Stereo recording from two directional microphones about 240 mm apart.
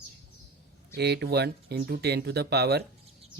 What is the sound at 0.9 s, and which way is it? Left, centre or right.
Speech, right.